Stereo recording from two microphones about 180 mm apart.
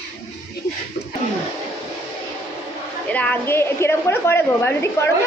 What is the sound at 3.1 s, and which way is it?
A woman's voice, 10° left (ahead or behind).